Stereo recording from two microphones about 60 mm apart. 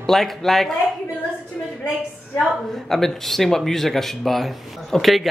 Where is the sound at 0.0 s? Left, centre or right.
Centre.